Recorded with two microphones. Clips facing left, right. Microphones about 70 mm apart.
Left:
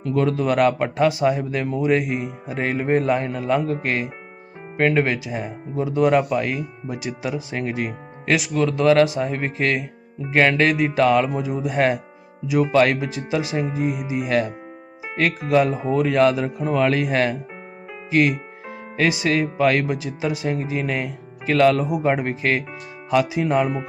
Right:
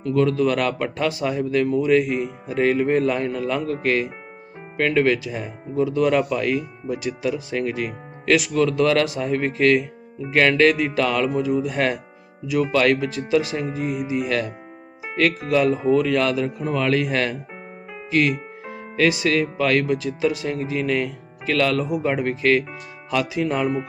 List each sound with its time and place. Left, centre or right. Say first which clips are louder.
0.1 s speech: right 1 dB; centre
8.4 s speech: even; centre
15.5 s speech: even; centre